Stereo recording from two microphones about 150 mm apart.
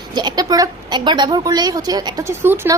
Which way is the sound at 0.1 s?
30° right (ahead or behind).